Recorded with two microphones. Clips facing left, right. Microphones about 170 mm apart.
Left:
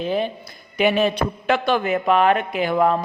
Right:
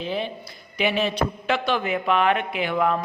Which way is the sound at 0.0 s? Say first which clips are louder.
Left 5 dB; 45° left (ahead or behind).